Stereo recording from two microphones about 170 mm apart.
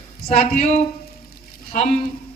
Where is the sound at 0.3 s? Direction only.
40° left (ahead or behind).